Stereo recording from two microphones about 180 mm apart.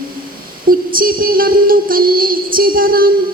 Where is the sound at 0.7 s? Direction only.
55° right (ahead or behind).